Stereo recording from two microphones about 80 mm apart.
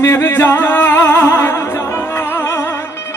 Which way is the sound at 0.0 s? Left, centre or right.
Left.